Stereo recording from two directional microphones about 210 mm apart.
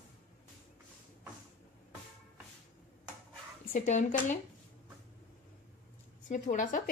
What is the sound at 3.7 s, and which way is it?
Speech, 35° left (ahead or behind).